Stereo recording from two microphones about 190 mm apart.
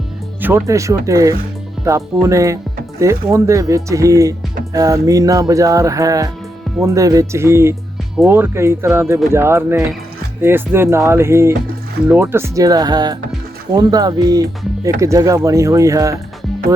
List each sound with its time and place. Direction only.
0.4 s speech: 15° right (ahead or behind)